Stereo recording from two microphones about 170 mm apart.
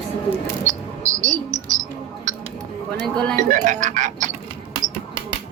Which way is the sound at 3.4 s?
45° right (ahead or behind).